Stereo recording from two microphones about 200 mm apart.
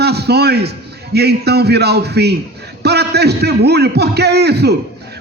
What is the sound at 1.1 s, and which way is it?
A man's voice, 55° right (ahead or behind).